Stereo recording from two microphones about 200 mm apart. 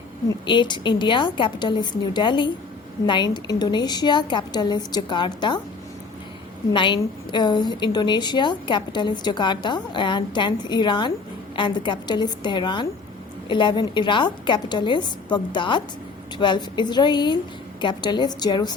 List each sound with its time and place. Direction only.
0.3 s a woman's voice: 25° left (ahead or behind)
6.7 s a woman's voice: 25° left (ahead or behind)